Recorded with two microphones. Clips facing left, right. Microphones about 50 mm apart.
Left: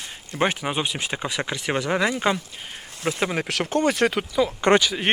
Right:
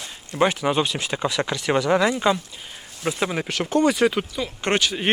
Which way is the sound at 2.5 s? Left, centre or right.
Left.